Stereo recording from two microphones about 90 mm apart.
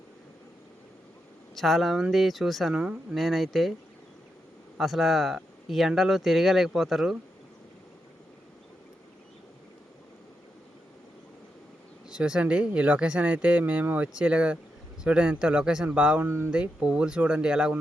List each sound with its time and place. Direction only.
1.5 s speech: centre (ahead or behind)
4.8 s speech: centre (ahead or behind)
12.0 s speech: 10° right (ahead or behind)
16.2 s speech: 25° right (ahead or behind)
16.5 s speech: 10° right (ahead or behind)